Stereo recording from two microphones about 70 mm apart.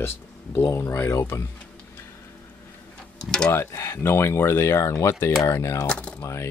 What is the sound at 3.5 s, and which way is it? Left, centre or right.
Speech, left.